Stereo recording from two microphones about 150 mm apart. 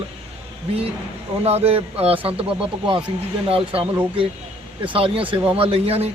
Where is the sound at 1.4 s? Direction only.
40° right (ahead or behind).